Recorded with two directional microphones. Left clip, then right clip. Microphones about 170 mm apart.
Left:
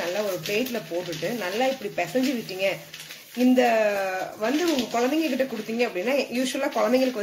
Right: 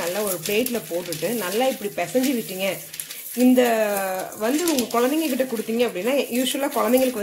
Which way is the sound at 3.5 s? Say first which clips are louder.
Right 1 dB; 35° right (ahead or behind).